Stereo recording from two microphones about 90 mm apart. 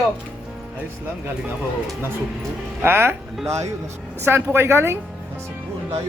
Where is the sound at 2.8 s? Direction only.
25° right (ahead or behind).